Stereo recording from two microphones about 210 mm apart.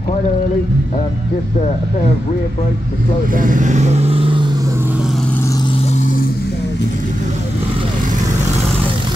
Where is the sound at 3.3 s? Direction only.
40° right (ahead or behind); by 4.7 s 20° right (ahead or behind).